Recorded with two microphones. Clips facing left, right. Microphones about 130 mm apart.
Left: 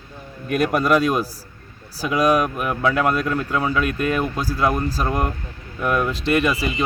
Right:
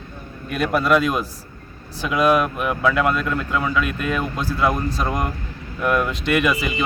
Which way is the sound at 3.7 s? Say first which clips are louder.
Left 1 dB; 45° left (ahead or behind).